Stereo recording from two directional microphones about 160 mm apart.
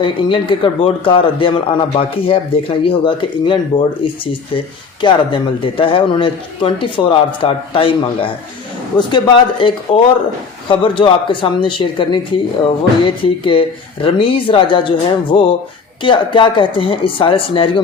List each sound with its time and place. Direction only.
0.0 s speech: 30° left (ahead or behind)
13.2 s speech: 35° left (ahead or behind)